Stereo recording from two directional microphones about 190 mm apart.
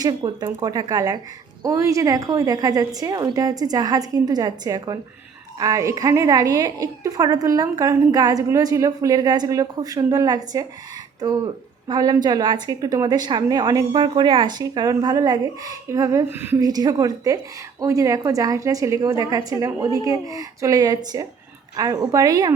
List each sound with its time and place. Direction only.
0.0 s a woman's voice: 20° right (ahead or behind)
11.9 s a woman's voice: 20° right (ahead or behind)